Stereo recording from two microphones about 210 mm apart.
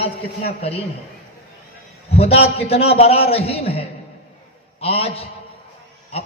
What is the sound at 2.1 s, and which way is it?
A man's voice, 30° left (ahead or behind).